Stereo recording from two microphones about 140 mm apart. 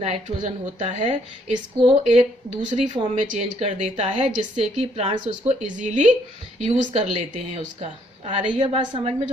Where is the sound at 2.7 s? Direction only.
60° right (ahead or behind).